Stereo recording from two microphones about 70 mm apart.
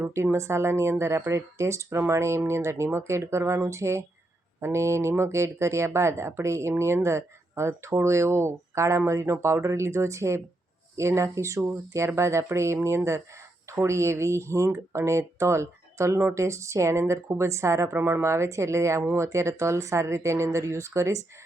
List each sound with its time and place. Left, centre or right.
0.0 s speech: right